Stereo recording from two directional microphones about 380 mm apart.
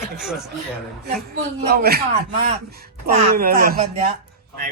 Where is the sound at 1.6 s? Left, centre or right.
Right.